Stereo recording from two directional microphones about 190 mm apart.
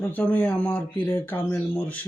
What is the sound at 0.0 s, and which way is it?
Speech, 10° left (ahead or behind).